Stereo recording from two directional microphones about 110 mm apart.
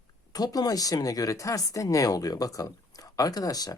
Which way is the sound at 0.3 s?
35° left (ahead or behind).